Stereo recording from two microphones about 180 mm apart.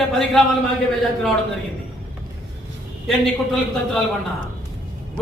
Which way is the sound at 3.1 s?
Centre (ahead or behind).